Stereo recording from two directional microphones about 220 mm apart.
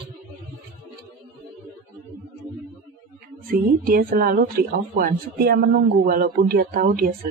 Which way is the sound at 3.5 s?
40° right (ahead or behind).